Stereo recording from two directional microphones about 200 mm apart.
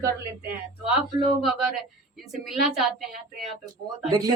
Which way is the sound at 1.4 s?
Centre (ahead or behind).